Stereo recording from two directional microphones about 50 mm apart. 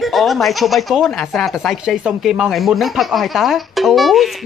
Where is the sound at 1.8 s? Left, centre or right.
Centre.